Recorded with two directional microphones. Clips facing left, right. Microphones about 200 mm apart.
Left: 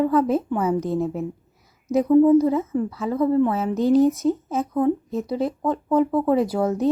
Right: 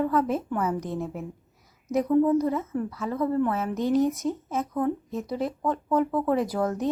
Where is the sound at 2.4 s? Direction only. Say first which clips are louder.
Left 6 dB; 25° left (ahead or behind).